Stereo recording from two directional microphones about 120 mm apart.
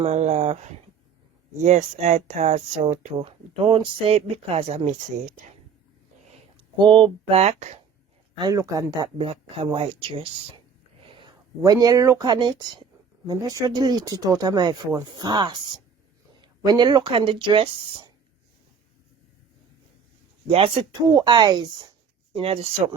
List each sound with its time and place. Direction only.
0.0 s speech: 70° right (ahead or behind)
1.6 s speech: 75° right (ahead or behind)
3.2 s speech: 50° right (ahead or behind)
6.7 s speech: 40° right (ahead or behind)
7.3 s speech: 60° right (ahead or behind)
8.4 s speech: 30° right (ahead or behind)
9.1 s speech: 50° right (ahead or behind)
11.0 s a sound: 45° right (ahead or behind)
11.6 s speech: 30° right (ahead or behind)
20.5 s speech: 50° right (ahead or behind)
21.1 s speech: 35° right (ahead or behind)
22.3 s speech: 50° right (ahead or behind)